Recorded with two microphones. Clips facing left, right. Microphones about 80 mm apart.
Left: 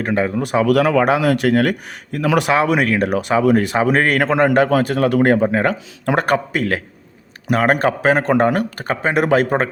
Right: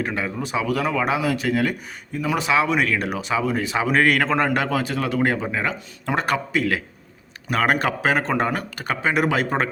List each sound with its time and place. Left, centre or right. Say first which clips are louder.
0.0 s speech: left 7 dB; left
0.4 s speech: left 8 dB; left
2.1 s a man's voice: left 7 dB; left
2.5 s speech: even; left
3.8 s a man's voice: left 3 dB; left
7.5 s a man's voice: left 5 dB; left